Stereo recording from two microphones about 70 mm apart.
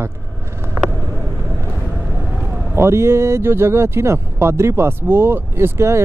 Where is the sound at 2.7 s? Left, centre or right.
Right.